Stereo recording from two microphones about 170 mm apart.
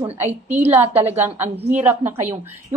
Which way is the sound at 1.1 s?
10° right (ahead or behind).